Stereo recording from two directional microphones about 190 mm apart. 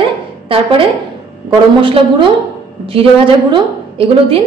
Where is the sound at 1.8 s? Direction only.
25° right (ahead or behind).